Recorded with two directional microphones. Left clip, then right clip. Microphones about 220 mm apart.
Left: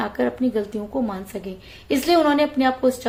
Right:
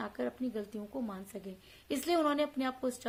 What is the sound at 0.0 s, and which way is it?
A woman's voice, 25° right (ahead or behind).